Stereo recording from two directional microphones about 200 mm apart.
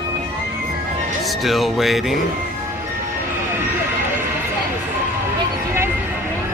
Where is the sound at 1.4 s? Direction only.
Centre (ahead or behind).